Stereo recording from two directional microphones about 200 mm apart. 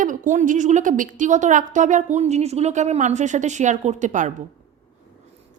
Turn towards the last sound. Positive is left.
turn(degrees=-40)  # may be behind; listen again after turning